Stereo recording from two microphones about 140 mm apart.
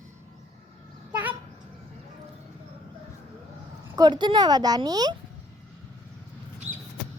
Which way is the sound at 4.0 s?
35° right (ahead or behind).